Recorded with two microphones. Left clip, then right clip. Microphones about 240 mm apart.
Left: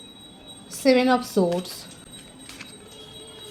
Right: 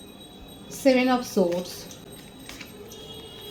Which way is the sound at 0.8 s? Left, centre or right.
Left.